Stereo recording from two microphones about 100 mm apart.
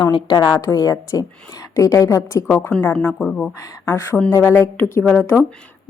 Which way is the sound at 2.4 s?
20° left (ahead or behind).